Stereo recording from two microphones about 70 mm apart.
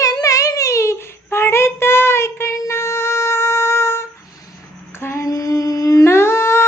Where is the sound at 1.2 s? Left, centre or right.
Left.